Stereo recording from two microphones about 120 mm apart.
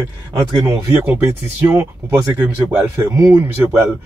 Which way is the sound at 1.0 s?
20° right (ahead or behind).